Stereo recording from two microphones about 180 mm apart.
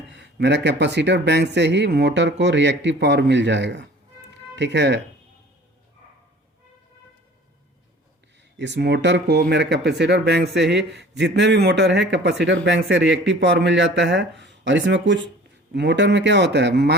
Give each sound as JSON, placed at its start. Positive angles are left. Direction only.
{"t": 0.1, "sound": "speech", "side_deg": -75}
{"t": 8.5, "sound": "speech", "side_deg": -75}
{"t": 15.7, "sound": "speech", "side_deg": -75}